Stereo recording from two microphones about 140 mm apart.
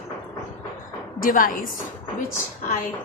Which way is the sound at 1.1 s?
90° left.